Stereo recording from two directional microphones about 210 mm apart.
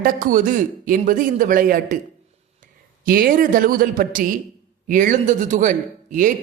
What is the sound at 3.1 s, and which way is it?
A man's voice, 45° right (ahead or behind).